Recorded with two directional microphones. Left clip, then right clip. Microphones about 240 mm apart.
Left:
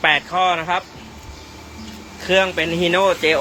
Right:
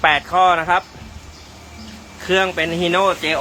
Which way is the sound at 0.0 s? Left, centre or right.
Centre.